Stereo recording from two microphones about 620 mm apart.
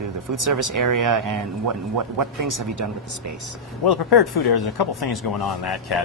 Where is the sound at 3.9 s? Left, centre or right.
Left.